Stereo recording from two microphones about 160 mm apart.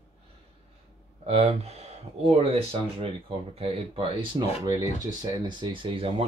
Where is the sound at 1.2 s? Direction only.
40° right (ahead or behind).